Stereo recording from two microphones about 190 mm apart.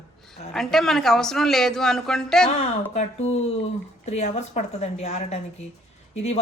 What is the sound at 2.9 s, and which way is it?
Speech, 35° left (ahead or behind).